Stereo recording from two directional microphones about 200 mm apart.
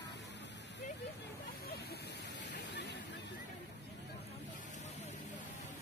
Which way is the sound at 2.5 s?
60° left (ahead or behind).